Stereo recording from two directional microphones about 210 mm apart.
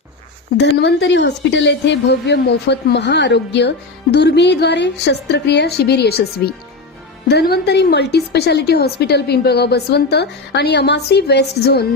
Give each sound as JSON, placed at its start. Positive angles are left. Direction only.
{"t": 0.5, "sound": "a woman's voice", "side_deg": 50}